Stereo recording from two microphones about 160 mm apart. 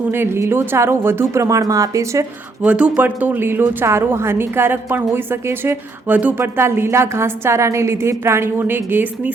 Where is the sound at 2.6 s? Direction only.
10° right (ahead or behind).